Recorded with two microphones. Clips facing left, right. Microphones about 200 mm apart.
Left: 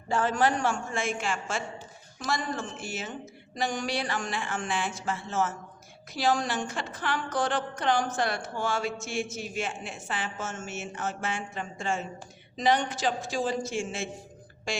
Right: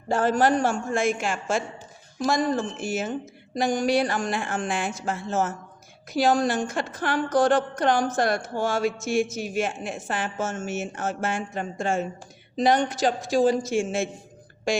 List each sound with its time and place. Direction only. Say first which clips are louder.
0.1 s a man's voice: right 5 dB; 40° right (ahead or behind)